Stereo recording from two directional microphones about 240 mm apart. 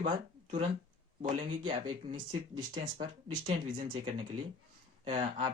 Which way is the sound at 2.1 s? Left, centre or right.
Right.